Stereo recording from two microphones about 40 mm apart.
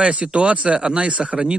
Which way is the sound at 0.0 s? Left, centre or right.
Right.